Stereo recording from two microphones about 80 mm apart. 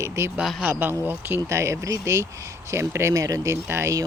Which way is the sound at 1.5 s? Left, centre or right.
Right.